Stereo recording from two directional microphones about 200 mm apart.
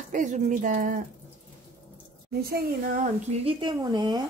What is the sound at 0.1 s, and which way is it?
Speech, 40° right (ahead or behind).